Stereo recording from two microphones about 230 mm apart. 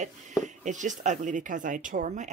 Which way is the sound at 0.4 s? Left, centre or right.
Right.